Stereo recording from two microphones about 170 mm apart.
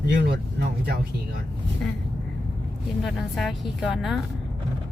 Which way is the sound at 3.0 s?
Centre (ahead or behind).